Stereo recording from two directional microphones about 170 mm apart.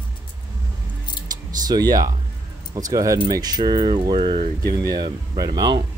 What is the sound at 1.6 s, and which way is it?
Speech, 25° right (ahead or behind).